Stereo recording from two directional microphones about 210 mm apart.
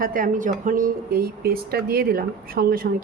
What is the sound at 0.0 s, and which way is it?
Speech, 40° right (ahead or behind).